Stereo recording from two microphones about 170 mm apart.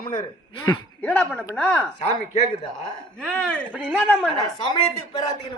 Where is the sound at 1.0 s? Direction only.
10° left (ahead or behind).